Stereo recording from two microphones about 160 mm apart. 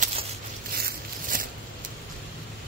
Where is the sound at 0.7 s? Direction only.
70° right (ahead or behind).